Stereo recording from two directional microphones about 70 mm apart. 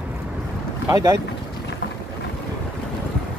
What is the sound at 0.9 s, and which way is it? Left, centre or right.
Speech, right.